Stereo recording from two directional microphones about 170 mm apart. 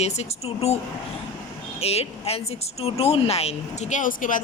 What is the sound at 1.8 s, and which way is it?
A woman's voice, 35° left (ahead or behind).